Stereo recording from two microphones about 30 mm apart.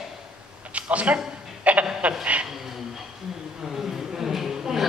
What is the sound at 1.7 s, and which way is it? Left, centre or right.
Speech, right.